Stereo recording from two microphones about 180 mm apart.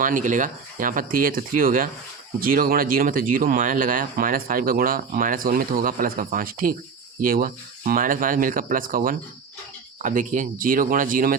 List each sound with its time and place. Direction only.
0.0 s speech: 45° right (ahead or behind)